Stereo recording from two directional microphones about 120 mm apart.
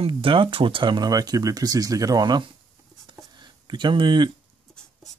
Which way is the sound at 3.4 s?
40° right (ahead or behind).